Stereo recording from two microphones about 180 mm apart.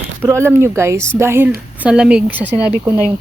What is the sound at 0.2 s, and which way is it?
Speech, 15° right (ahead or behind).